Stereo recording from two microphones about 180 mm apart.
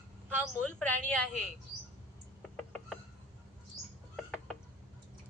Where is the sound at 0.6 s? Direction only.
5° left (ahead or behind).